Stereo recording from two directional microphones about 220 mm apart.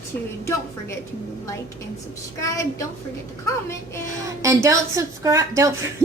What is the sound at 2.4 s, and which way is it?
Speech, 15° left (ahead or behind).